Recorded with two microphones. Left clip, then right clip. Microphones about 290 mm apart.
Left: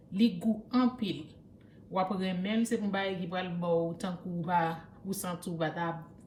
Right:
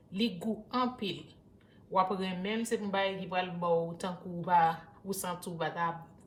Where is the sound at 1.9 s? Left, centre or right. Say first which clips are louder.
Right 2 dB; centre.